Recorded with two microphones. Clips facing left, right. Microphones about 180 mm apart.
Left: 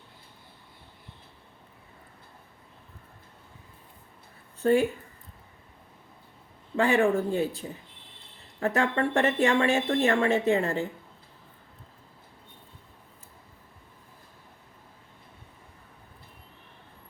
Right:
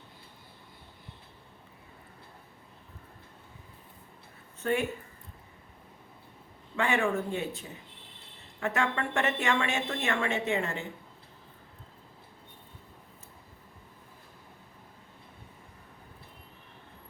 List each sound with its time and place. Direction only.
4.6 s a woman's voice: 35° left (ahead or behind)
6.7 s a woman's voice: 35° left (ahead or behind)
8.6 s a woman's voice: 35° left (ahead or behind)